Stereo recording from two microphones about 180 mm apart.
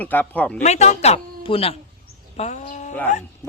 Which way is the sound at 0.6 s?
40° left (ahead or behind).